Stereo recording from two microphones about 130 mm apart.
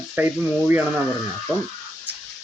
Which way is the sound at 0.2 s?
15° right (ahead or behind).